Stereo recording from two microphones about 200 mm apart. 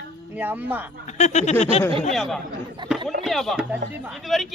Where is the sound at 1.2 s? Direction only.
35° left (ahead or behind).